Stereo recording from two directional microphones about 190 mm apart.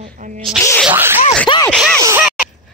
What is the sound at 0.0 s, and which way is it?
Speech, 40° right (ahead or behind).